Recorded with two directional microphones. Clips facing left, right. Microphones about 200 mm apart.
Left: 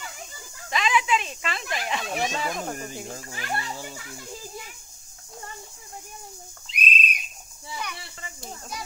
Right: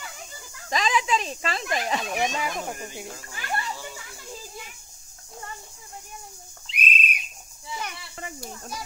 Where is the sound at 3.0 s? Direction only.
40° left (ahead or behind).